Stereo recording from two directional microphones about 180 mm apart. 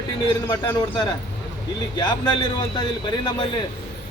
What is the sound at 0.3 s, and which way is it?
Speech, 25° left (ahead or behind).